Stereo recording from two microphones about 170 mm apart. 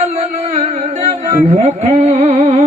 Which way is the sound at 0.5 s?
40° right (ahead or behind).